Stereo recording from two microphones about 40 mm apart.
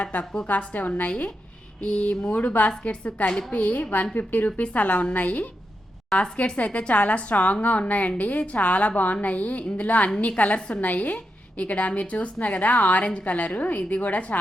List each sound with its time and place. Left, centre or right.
0.4 s a woman's voice: left
1.8 s speech: left
2.0 s a woman's voice: left